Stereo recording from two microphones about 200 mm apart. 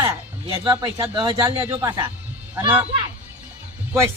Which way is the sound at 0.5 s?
20° right (ahead or behind).